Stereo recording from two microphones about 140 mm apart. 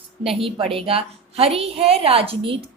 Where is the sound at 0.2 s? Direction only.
40° right (ahead or behind).